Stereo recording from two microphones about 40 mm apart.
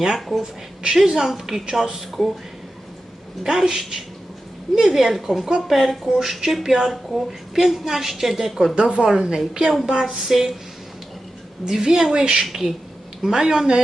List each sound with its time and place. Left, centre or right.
0.2 s speech: centre
0.8 s a woman's voice: centre
3.4 s a woman's voice: centre
8.7 s a woman's voice: right
9.0 s a woman's voice: centre
11.6 s a woman's voice: centre
12.5 s a woman's voice: centre